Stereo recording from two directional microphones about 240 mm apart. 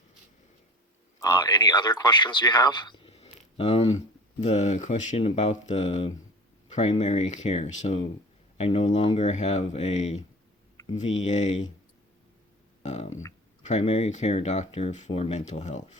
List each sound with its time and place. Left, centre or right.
1.2 s a man's voice: centre
12.8 s speech: left